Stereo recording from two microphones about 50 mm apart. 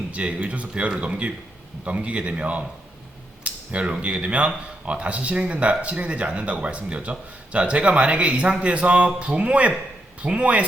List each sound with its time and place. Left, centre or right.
0.1 s speech: right
3.4 s a sound: right
4.0 s speech: right